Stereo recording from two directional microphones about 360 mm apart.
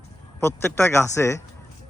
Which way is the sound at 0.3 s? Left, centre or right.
Centre.